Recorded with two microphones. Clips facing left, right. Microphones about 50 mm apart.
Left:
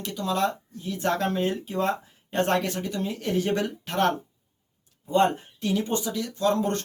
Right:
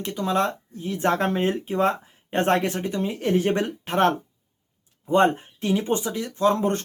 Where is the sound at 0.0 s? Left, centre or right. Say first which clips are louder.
Right 3 dB; right.